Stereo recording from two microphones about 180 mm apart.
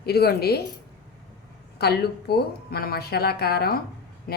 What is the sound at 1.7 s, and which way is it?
A woman's voice, 60° left (ahead or behind).